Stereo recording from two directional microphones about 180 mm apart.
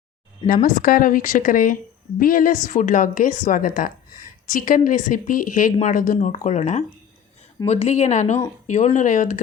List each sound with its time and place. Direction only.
0.4 s speech: 50° left (ahead or behind)